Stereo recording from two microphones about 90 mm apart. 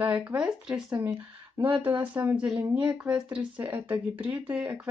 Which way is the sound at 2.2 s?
30° right (ahead or behind).